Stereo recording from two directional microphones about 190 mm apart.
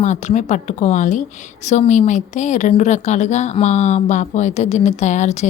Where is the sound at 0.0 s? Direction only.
40° left (ahead or behind).